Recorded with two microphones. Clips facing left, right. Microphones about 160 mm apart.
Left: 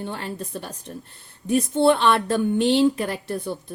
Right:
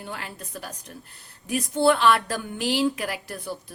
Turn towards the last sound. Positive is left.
turn(degrees=25)  # may be behind; listen again after turning